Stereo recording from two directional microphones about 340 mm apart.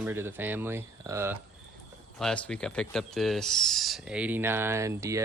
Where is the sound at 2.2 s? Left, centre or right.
Centre.